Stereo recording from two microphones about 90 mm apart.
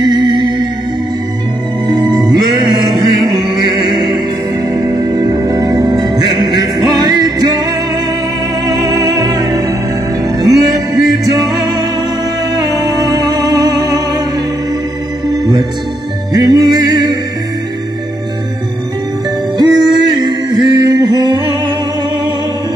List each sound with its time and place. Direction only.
0.0 s music: 55° right (ahead or behind)
1.9 s music: 45° right (ahead or behind)
5.1 s music: 45° right (ahead or behind)
8.6 s music: 45° right (ahead or behind)
12.7 s music: 45° right (ahead or behind)
15.3 s music: 45° right (ahead or behind)
19.6 s music: 50° right (ahead or behind)